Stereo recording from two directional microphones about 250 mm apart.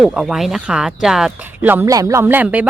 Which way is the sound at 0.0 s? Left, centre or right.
Centre.